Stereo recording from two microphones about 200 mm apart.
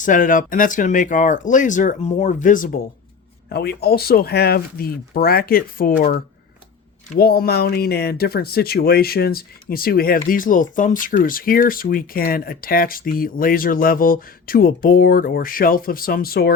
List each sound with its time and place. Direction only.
0.0 s speech: 40° left (ahead or behind)
3.5 s speech: 50° left (ahead or behind)